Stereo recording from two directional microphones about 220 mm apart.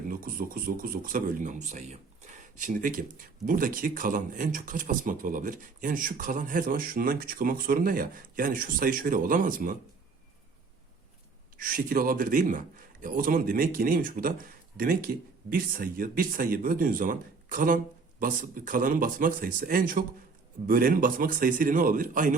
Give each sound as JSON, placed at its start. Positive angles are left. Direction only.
{"t": 0.1, "sound": "speech", "side_deg": -40}
{"t": 11.5, "sound": "speech", "side_deg": -40}